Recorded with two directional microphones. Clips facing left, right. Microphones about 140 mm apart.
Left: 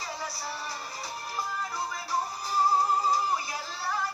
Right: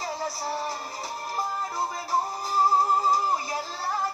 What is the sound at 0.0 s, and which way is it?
Music, 45° right (ahead or behind).